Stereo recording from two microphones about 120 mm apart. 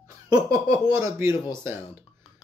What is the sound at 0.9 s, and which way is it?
Speech, 25° right (ahead or behind).